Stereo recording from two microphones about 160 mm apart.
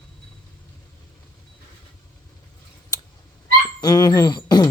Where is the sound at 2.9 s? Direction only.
20° left (ahead or behind).